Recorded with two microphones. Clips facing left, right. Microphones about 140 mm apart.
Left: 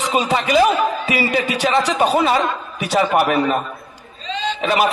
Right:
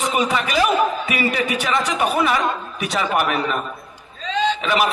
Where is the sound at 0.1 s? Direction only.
25° left (ahead or behind).